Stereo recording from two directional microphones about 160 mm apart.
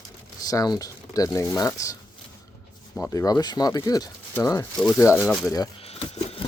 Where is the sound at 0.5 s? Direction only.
25° left (ahead or behind).